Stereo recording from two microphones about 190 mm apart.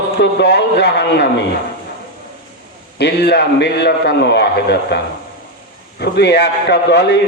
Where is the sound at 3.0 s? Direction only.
65° left (ahead or behind).